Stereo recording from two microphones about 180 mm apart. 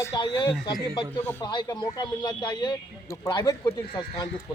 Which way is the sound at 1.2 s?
10° left (ahead or behind).